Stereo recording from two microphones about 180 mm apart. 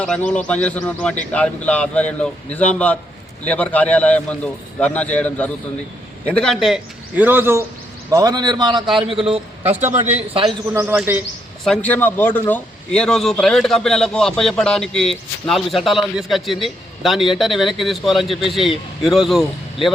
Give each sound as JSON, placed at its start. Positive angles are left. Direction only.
{"t": 0.0, "sound": "a man's voice", "side_deg": 5}
{"t": 10.7, "sound": "speech", "side_deg": -10}
{"t": 11.6, "sound": "a man's voice", "side_deg": 5}